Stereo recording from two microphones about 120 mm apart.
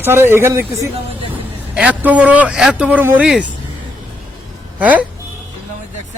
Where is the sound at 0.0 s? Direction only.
20° right (ahead or behind).